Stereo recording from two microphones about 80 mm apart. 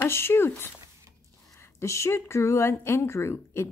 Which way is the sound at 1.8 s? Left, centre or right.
Left.